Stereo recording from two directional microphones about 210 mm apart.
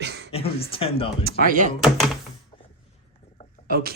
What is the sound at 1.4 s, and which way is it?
Speech, 40° right (ahead or behind).